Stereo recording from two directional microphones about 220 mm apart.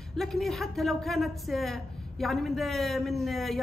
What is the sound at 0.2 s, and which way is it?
A man's voice, centre (ahead or behind).